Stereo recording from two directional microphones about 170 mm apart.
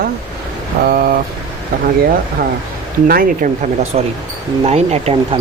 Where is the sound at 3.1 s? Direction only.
60° right (ahead or behind).